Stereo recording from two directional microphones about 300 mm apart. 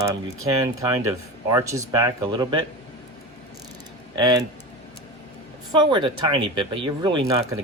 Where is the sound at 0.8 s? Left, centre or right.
Centre.